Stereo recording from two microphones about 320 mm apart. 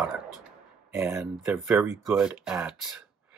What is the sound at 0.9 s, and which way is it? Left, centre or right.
Speech, centre.